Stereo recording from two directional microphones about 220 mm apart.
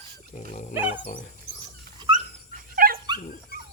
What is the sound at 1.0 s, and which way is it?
Speech, 40° left (ahead or behind).